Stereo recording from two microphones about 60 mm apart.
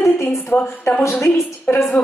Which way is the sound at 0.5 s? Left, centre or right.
Left.